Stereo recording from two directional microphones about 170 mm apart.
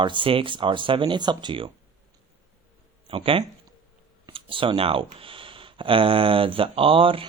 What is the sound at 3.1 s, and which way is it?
Speech, 30° right (ahead or behind).